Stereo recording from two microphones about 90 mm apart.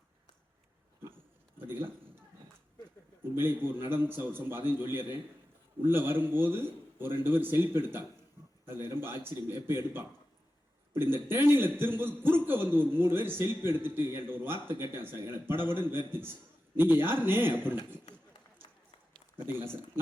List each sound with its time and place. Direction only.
1.5 s a sound: 25° right (ahead or behind)
3.3 s a man's voice: 25° right (ahead or behind)
8.6 s a sound: 25° right (ahead or behind)
9.6 s a man's voice: 25° right (ahead or behind)
18.6 s run: 65° left (ahead or behind)
19.5 s a man's voice: 25° right (ahead or behind)